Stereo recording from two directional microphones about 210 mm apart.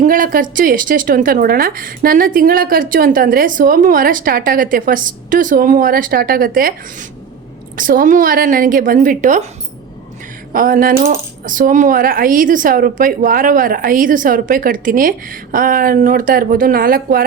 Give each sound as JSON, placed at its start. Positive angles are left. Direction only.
{"t": 0.0, "sound": "a woman's voice", "side_deg": -40}
{"t": 10.5, "sound": "a woman's voice", "side_deg": -40}